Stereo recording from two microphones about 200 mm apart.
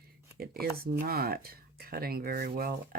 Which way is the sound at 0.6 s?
50° right (ahead or behind).